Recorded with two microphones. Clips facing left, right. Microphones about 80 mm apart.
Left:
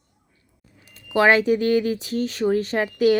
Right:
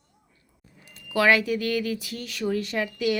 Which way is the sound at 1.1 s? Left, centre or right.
Left.